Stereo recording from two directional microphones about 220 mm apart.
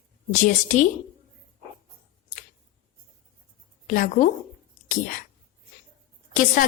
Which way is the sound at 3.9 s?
40° left (ahead or behind).